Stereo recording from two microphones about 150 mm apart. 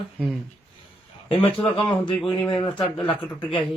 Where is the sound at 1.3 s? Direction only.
35° left (ahead or behind).